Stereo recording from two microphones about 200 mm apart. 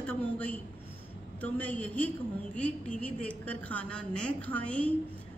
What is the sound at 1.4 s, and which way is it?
A woman's voice, 10° left (ahead or behind).